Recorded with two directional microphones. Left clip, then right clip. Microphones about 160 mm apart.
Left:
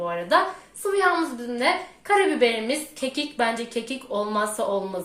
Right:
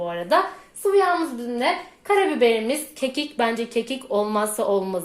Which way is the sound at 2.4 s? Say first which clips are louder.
Right 3 dB; 30° right (ahead or behind).